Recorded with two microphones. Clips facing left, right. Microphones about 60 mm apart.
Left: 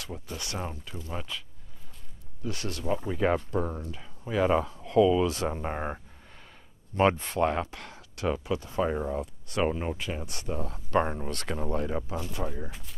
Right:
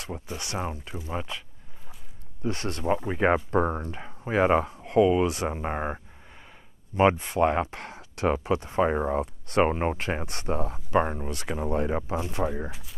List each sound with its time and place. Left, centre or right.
0.0 s speech: right
2.4 s speech: right
5.3 s speech: centre; by 10.7 s right
10.7 s speech: centre
11.7 s speech: right